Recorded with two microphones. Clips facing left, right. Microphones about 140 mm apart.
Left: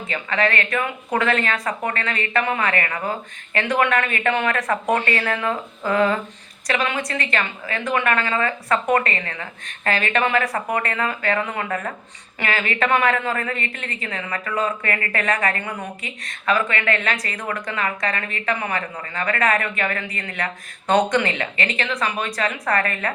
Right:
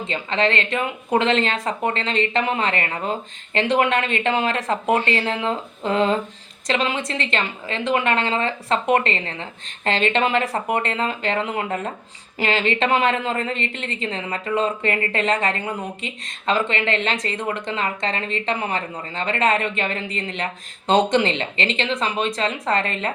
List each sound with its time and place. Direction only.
0.1 s a woman's voice: 25° right (ahead or behind)